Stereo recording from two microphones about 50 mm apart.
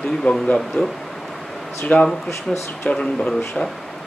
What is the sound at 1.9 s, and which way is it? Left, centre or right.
Speech, left.